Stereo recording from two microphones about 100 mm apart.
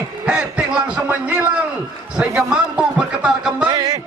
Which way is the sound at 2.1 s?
10° right (ahead or behind).